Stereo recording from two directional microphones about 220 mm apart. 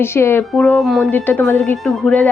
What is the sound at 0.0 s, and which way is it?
A woman's voice, 10° left (ahead or behind).